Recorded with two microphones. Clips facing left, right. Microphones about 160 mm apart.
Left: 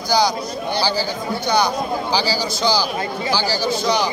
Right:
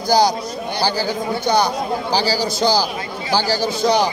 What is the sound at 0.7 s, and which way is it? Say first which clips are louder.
Speech: right 1 dB; 50° right (ahead or behind).